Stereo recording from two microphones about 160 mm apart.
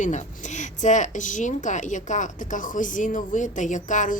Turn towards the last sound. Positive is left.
turn(degrees=50)  # may be behind; listen again after turning